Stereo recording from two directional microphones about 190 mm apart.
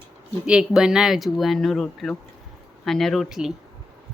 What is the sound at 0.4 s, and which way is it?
A woman's voice, 5° right (ahead or behind).